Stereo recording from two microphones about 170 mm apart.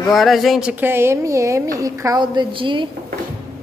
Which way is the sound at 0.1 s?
Centre (ahead or behind).